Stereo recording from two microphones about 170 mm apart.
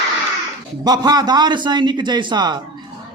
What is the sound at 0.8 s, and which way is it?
A man's voice, 25° right (ahead or behind).